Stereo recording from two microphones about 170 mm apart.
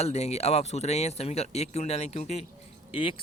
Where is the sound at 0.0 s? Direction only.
40° left (ahead or behind).